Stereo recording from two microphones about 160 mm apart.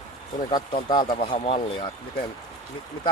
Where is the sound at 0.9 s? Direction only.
30° left (ahead or behind).